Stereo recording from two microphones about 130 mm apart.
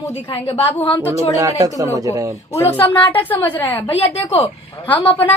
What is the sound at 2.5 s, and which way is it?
A woman's voice, 15° left (ahead or behind).